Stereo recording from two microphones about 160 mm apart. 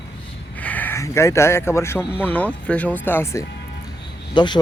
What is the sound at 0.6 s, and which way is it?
Speech, 10° left (ahead or behind).